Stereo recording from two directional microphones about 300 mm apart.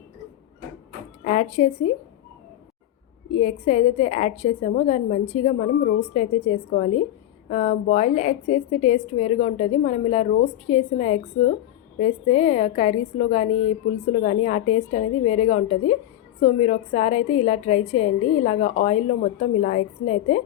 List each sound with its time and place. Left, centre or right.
1.2 s a woman's voice: left
3.3 s a woman's voice: left